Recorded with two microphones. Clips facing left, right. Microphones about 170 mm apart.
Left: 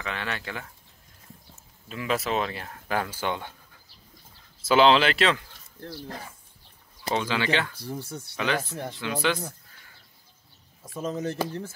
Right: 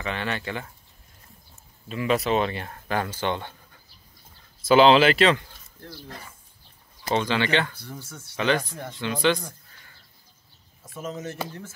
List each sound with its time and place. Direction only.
0.0 s speech: centre (ahead or behind)
4.6 s speech: centre (ahead or behind)
7.1 s speech: 5° left (ahead or behind)
11.2 s speech: 35° left (ahead or behind)